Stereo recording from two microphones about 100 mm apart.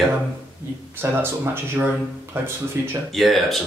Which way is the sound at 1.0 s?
30° right (ahead or behind).